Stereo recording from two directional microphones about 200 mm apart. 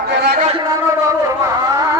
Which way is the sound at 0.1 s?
55° right (ahead or behind).